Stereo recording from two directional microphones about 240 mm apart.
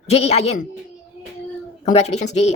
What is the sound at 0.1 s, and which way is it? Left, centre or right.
Speech, left.